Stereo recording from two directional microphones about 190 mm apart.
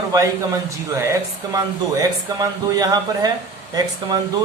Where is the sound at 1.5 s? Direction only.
20° right (ahead or behind).